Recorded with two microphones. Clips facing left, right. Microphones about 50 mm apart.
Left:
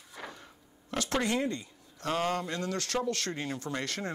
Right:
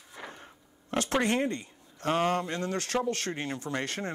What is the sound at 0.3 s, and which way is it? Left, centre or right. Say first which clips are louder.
Speech: right 1 dB; right.